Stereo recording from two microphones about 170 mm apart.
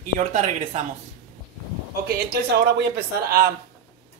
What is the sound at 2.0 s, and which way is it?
Speech, 70° right (ahead or behind).